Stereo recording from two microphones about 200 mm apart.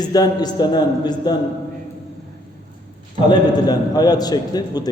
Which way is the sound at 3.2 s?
20° left (ahead or behind).